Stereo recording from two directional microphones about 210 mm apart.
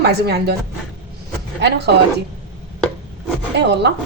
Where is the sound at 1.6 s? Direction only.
55° right (ahead or behind).